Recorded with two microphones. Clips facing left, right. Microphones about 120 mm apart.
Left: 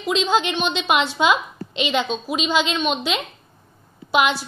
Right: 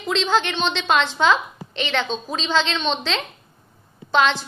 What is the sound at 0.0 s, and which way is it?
A woman's voice, 15° left (ahead or behind).